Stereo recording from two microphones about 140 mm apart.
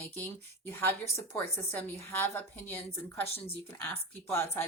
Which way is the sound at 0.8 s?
15° left (ahead or behind).